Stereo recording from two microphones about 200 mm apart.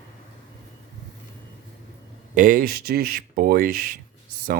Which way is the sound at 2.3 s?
40° right (ahead or behind).